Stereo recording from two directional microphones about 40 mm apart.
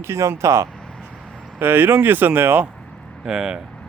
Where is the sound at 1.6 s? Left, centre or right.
Right.